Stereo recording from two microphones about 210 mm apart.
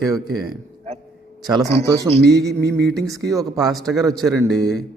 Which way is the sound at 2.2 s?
50° right (ahead or behind).